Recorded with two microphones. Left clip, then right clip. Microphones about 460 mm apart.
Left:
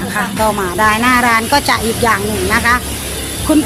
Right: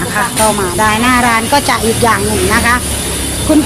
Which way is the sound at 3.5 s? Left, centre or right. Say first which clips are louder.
Right 2 dB; left.